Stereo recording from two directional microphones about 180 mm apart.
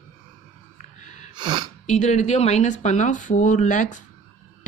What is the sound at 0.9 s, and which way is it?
Gasp, 40° left (ahead or behind).